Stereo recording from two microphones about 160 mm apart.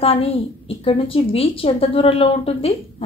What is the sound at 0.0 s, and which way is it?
Speech, 35° left (ahead or behind).